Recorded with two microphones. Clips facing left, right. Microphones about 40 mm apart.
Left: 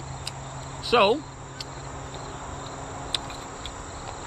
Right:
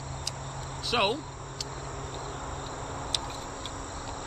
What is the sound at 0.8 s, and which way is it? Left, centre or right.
Speech, centre.